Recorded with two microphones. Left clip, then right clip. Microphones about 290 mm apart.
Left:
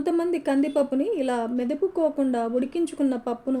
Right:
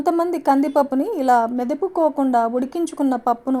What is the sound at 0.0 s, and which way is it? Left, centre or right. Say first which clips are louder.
Speech: right 6 dB; right.